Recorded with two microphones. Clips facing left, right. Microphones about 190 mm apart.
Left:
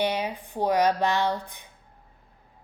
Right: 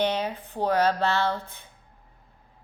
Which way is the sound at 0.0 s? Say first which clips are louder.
Right 1 dB; 10° left (ahead or behind).